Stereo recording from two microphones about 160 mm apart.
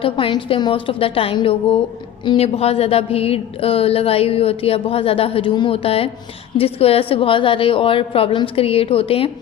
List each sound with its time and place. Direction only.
0.0 s speech: 30° left (ahead or behind)